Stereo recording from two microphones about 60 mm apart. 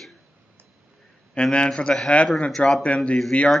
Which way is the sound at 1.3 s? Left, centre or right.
Centre.